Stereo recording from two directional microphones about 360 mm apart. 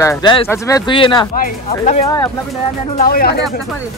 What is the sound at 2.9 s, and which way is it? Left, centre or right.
Speech, left.